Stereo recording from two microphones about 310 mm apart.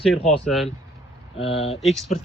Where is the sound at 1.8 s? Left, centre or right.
Centre.